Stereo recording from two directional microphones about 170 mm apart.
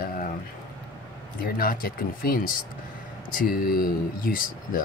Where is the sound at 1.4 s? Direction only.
60° left (ahead or behind).